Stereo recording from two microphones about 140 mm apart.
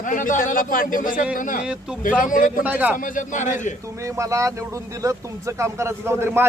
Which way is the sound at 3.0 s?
65° left (ahead or behind).